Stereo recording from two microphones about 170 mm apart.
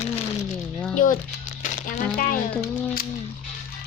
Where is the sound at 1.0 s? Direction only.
55° left (ahead or behind).